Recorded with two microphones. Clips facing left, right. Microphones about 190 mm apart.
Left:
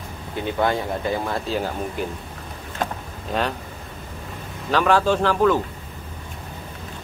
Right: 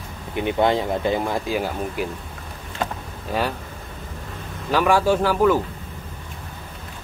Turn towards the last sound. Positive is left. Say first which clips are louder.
# right 1 dB
turn(degrees=-10)  # may be behind; listen again after turning